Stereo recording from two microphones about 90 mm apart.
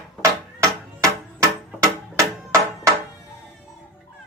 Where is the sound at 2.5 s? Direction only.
30° right (ahead or behind).